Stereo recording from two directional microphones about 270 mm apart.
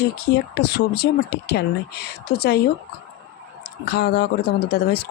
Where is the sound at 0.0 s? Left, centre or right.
Left.